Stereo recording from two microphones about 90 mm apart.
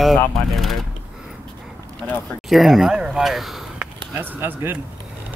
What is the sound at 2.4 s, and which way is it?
Speech, centre (ahead or behind).